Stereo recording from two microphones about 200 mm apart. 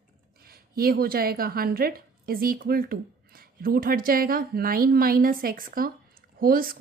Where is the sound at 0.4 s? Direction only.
50° right (ahead or behind).